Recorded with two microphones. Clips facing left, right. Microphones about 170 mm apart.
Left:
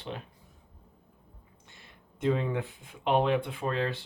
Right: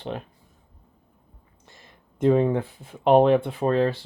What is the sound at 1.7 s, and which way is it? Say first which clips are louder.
Speech: right 5 dB; 45° right (ahead or behind).